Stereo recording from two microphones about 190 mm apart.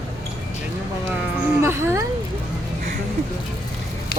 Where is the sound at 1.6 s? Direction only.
15° right (ahead or behind).